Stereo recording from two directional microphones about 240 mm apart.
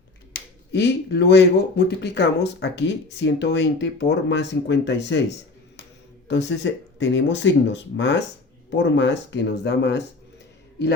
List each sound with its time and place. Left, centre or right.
0.3 s speech: left
6.2 s speech: left